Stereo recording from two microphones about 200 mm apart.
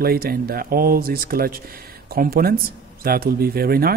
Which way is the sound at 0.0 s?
50° right (ahead or behind).